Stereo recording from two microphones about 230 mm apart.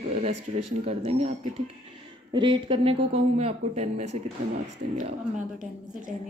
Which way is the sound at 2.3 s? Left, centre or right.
Right.